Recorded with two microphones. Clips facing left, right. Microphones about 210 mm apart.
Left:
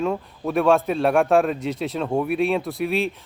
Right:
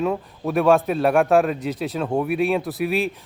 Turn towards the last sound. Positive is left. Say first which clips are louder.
# right 1 dB
turn(degrees=0)  # may be behind; listen again after turning